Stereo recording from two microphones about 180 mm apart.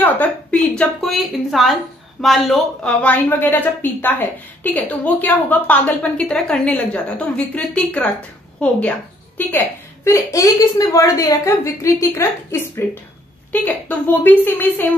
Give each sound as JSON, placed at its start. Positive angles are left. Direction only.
{"t": 0.0, "sound": "a woman's voice", "side_deg": 10}
{"t": 9.4, "sound": "a woman's voice", "side_deg": 10}